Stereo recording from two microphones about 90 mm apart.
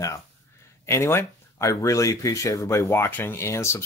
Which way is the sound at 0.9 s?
30° left (ahead or behind).